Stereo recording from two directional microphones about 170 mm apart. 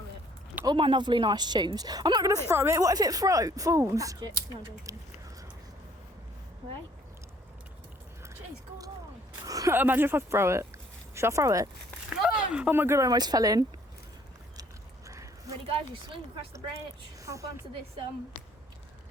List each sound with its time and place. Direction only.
0.6 s speech: 30° right (ahead or behind)
9.5 s speech: 20° right (ahead or behind)
12.2 s speech: 5° right (ahead or behind); by 13.7 s 20° right (ahead or behind)
15.0 s a sound: 20° right (ahead or behind)
15.7 s speech: 30° right (ahead or behind)
17.2 s a woman's voice: 20° right (ahead or behind)